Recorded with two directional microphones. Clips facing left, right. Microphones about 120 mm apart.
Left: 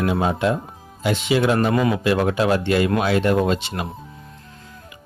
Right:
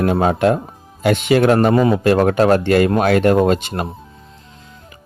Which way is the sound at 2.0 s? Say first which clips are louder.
Right 6 dB; 50° right (ahead or behind).